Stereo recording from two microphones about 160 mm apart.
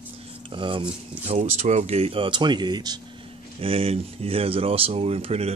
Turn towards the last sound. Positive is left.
turn(degrees=-40)  # may be behind; listen again after turning